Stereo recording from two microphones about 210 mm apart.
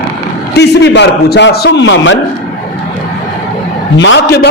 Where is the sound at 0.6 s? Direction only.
55° left (ahead or behind).